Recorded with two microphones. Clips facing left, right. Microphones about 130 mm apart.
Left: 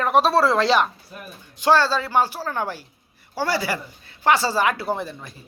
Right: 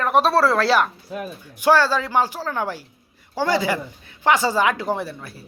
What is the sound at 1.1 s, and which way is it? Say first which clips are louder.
Speech: right 10 dB; 90° right.